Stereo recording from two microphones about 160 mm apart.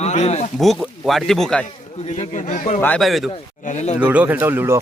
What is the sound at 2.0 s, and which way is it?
Speech, 45° left (ahead or behind).